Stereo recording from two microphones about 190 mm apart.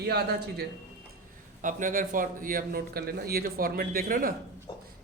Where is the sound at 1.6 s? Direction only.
45° right (ahead or behind).